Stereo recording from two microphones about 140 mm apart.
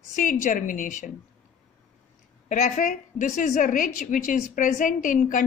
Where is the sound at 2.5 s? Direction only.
65° left (ahead or behind).